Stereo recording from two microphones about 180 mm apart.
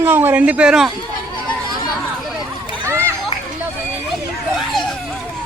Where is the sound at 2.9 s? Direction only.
15° right (ahead or behind).